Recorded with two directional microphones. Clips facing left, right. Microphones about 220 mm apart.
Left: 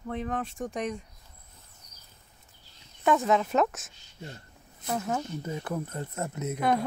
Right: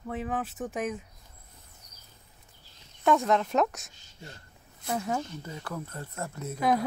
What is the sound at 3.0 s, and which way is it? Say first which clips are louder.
Speech: even; centre (ahead or behind).